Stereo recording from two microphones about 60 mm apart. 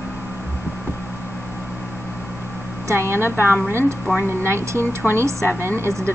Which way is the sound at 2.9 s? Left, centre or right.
Right.